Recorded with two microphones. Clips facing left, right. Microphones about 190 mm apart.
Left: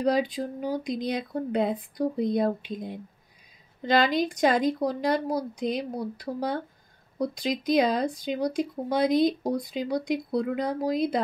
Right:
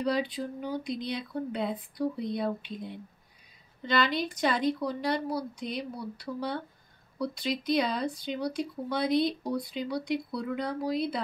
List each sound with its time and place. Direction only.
0.0 s speech: 45° left (ahead or behind)